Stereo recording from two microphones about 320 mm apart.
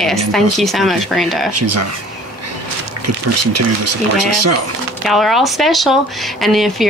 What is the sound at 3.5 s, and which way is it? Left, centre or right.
Speech, right.